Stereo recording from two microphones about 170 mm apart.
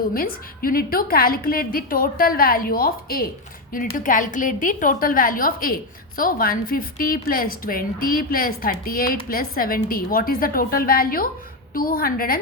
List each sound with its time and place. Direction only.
0.1 s a woman's voice: 60° left (ahead or behind)